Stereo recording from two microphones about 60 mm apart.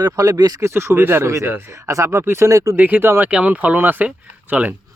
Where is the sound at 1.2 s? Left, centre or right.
Right.